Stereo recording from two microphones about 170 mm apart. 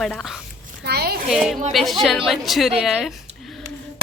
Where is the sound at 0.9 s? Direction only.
65° right (ahead or behind).